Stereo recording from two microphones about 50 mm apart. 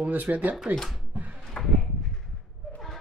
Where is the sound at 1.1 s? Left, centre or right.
Right.